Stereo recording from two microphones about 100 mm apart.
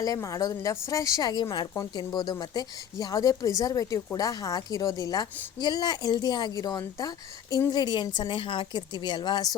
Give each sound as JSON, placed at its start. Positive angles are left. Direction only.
{"t": 0.0, "sound": "a woman's voice", "side_deg": 35}